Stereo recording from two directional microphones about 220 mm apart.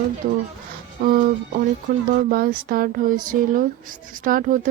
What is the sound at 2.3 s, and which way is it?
Speech, 40° right (ahead or behind).